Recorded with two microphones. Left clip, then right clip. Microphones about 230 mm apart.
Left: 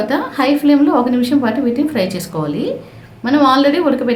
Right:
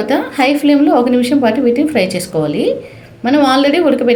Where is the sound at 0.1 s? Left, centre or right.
Centre.